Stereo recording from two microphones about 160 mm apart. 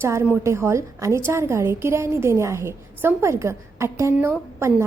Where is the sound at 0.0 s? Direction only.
15° right (ahead or behind).